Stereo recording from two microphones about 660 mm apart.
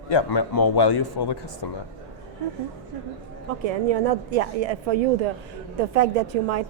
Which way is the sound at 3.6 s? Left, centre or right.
Right.